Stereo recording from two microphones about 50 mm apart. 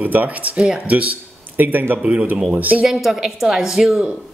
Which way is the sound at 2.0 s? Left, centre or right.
Right.